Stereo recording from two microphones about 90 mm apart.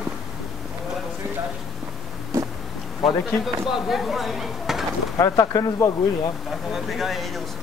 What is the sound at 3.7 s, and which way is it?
Speech, 5° right (ahead or behind).